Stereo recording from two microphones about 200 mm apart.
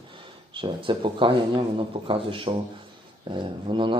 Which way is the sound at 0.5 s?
25° right (ahead or behind).